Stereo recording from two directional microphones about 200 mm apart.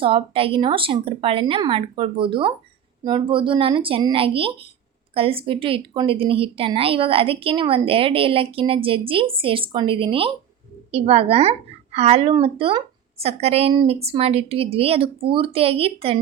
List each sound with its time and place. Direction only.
0.0 s speech: 25° right (ahead or behind)